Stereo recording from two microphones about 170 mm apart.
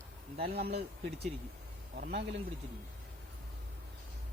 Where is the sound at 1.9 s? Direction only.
60° right (ahead or behind).